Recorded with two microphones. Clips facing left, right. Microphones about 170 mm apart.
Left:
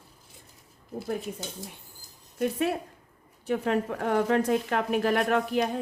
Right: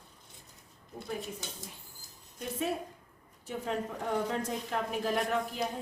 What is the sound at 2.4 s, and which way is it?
A woman's voice, 70° left (ahead or behind).